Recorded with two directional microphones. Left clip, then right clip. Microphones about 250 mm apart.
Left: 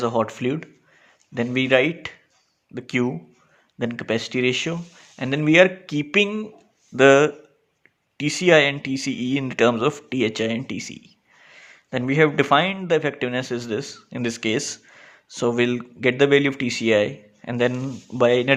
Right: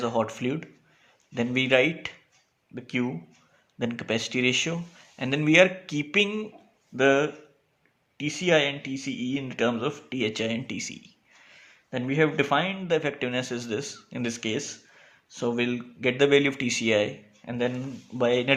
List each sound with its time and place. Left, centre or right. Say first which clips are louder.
0.0 s speech: left 5 dB; left
6.9 s speech: left 8 dB; left